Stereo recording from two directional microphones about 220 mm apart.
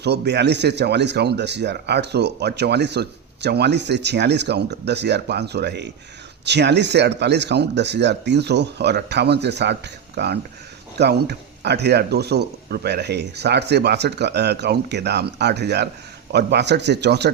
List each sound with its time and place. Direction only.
0.0 s speech: 50° right (ahead or behind)